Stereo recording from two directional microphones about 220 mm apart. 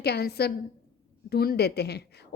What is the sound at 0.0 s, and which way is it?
A woman's voice, 45° left (ahead or behind).